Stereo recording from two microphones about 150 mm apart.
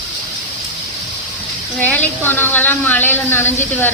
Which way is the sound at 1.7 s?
10° left (ahead or behind).